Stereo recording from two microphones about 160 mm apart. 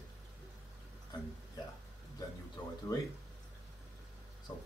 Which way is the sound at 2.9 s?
25° left (ahead or behind).